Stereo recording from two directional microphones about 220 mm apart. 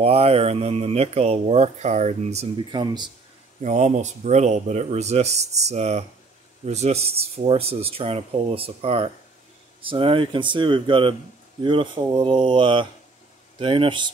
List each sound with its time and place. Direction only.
0.0 s speech: 25° right (ahead or behind)
3.6 s speech: 35° right (ahead or behind)